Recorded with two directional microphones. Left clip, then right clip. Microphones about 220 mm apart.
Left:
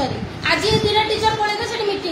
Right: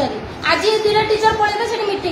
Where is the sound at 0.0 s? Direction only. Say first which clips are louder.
Right 3 dB; 20° left (ahead or behind).